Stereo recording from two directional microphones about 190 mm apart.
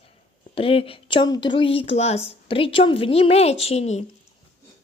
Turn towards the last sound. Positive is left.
turn(degrees=35)  # may be behind; listen again after turning